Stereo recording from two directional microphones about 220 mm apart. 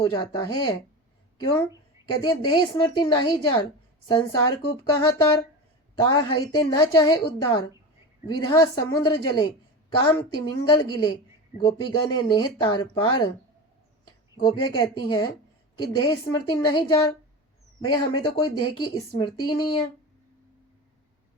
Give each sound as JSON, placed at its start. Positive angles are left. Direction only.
{"t": 0.0, "sound": "a woman's voice", "side_deg": 20}
{"t": 14.3, "sound": "speech", "side_deg": 20}